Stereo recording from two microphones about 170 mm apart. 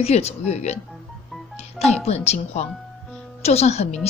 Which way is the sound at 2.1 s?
40° left (ahead or behind).